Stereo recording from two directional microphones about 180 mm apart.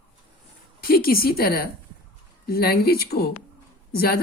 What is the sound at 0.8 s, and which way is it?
Speech, 55° left (ahead or behind).